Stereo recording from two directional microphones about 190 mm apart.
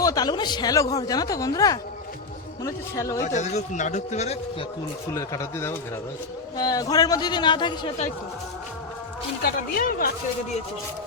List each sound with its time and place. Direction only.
0.0 s speech: 20° left (ahead or behind)
3.2 s speech: 40° left (ahead or behind)
5.1 s speech: 15° left (ahead or behind)
9.4 s speech: 50° left (ahead or behind)